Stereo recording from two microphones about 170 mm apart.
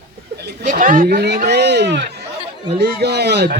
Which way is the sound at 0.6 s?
55° right (ahead or behind).